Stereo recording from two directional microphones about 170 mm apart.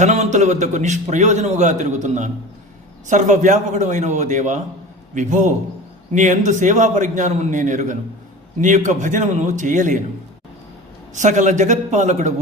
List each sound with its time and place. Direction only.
0.0 s a man's voice: 45° right (ahead or behind)
11.1 s a man's voice: 45° right (ahead or behind)